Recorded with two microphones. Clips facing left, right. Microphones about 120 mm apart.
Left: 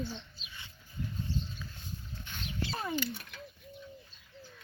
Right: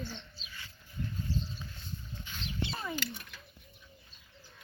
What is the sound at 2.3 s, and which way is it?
Dog, 55° left (ahead or behind).